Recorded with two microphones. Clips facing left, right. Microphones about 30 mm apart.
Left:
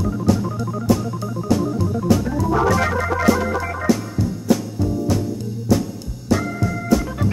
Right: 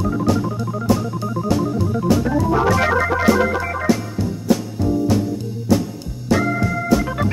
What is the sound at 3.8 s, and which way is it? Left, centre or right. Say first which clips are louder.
Music: left 2 dB; right.